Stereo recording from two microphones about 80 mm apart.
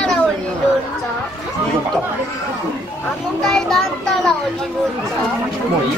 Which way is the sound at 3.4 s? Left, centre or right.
Centre.